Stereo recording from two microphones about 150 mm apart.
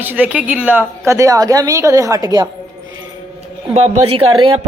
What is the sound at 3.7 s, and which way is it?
Speech, 45° right (ahead or behind).